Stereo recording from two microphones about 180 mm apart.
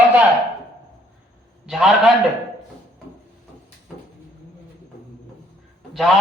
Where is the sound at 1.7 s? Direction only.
Centre (ahead or behind).